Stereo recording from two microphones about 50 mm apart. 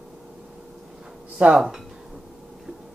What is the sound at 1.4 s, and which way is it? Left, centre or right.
Speech, right.